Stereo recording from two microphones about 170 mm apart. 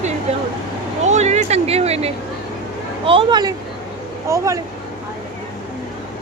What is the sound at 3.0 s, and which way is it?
Speech, 30° right (ahead or behind).